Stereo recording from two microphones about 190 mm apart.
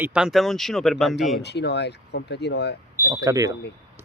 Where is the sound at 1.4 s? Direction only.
60° left (ahead or behind).